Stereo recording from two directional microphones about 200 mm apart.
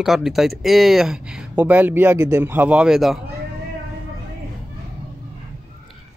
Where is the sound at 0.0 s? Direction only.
Centre (ahead or behind).